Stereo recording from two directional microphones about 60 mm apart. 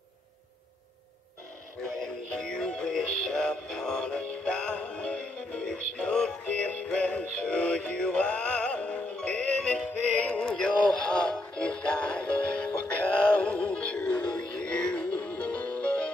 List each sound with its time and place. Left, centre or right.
1.8 s synthetic singing: centre
10.1 s music: left
10.4 s synthetic singing: centre
13.7 s music: centre